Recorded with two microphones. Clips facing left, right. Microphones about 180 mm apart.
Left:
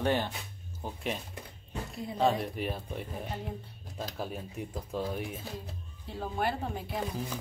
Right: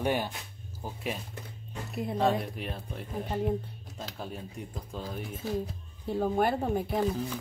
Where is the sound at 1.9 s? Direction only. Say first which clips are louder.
Right 9 dB; 60° right (ahead or behind).